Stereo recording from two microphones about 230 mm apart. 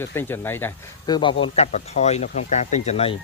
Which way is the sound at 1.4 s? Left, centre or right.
Left.